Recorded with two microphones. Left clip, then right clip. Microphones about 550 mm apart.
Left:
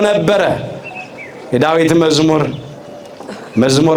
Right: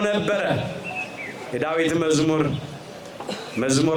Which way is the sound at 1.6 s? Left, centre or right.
Left.